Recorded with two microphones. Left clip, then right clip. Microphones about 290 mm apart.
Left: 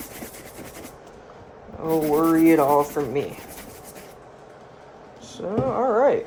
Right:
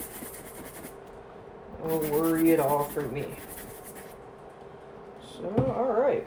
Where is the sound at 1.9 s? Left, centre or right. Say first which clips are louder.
Left 7 dB; left.